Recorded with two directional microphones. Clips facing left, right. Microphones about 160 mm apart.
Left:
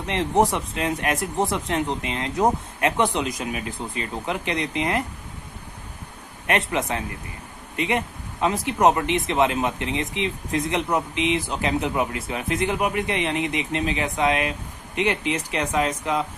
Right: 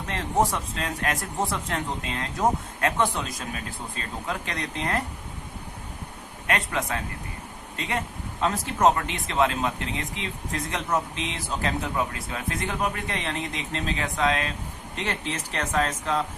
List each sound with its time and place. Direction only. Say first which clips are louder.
0.1 s speech: left 4 dB; 20° left (ahead or behind)
6.7 s speech: left 3 dB; 20° left (ahead or behind)